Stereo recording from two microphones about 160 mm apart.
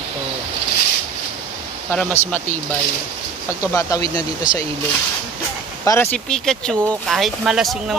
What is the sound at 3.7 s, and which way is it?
Speech, 20° left (ahead or behind).